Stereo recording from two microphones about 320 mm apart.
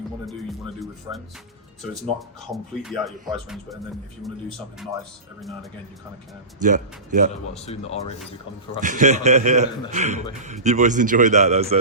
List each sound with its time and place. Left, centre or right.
2.5 s speech: centre
6.6 s speech: right
7.6 s speech: centre
8.8 s speech: right